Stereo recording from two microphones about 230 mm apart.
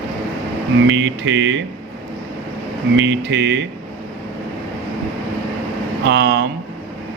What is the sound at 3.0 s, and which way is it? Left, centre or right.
Speech, right.